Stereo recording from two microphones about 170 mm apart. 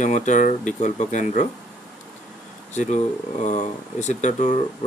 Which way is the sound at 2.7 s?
45° left (ahead or behind).